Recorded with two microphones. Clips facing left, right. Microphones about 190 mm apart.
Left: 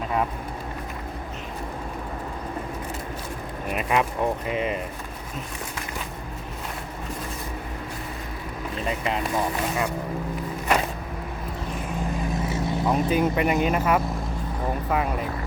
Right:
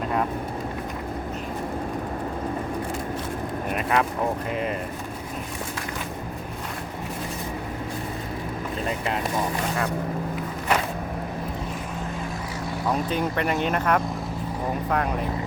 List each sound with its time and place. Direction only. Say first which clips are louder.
3.8 s speech: even; 10° left (ahead or behind)
12.5 s vehicle: left 3 dB; 25° left (ahead or behind)
12.9 s speech: left 3 dB; 5° left (ahead or behind)